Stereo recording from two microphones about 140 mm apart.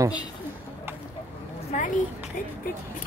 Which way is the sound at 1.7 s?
60° left (ahead or behind).